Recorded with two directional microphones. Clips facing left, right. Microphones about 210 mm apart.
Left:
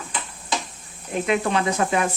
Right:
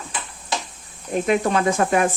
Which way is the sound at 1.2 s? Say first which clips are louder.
Right 3 dB; 40° right (ahead or behind).